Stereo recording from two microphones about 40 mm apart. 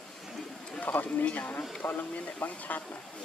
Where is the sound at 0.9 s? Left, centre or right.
Left.